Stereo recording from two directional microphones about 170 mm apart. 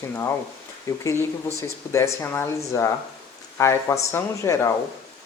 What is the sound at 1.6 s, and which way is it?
Speech, 15° left (ahead or behind).